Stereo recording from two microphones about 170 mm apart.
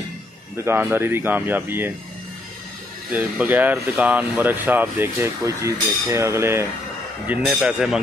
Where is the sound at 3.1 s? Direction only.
10° right (ahead or behind).